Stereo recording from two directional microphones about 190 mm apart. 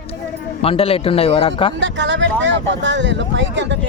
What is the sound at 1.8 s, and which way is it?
Speech, 75° right (ahead or behind).